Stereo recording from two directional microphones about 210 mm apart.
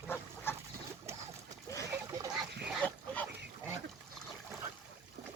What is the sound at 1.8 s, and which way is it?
Duck, 15° right (ahead or behind).